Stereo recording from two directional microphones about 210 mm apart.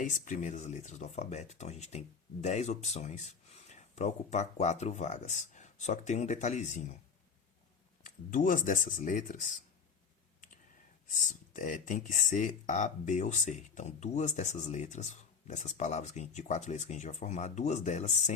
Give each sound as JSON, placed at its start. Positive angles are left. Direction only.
{"t": 0.0, "sound": "speech", "side_deg": 35}
{"t": 8.0, "sound": "speech", "side_deg": 40}
{"t": 11.1, "sound": "speech", "side_deg": 35}